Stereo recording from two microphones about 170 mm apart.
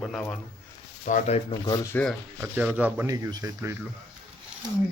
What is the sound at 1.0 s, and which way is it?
Speech, 50° left (ahead or behind).